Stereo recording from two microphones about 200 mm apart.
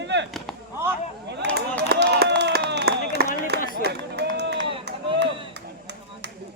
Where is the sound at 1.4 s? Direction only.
55° right (ahead or behind).